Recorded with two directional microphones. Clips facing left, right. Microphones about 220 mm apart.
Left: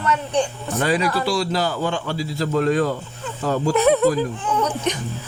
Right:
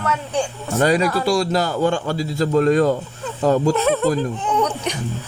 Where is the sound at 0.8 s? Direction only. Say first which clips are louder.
Right 3 dB; 45° right (ahead or behind).